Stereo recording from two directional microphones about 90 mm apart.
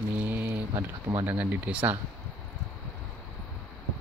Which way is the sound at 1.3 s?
20° right (ahead or behind).